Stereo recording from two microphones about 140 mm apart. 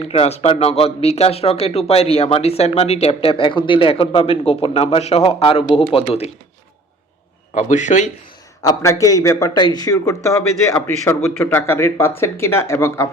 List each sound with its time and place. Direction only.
0.0 s speech: 50° left (ahead or behind)
7.5 s a man's voice: 60° left (ahead or behind)
8.6 s a man's voice: 25° left (ahead or behind)